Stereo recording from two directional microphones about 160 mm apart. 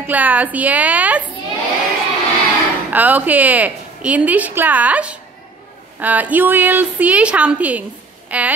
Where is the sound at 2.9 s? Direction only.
10° right (ahead or behind).